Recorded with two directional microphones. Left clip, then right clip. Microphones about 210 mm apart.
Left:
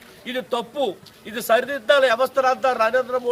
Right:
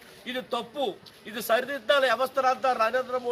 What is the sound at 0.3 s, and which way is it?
A man's voice, 10° left (ahead or behind).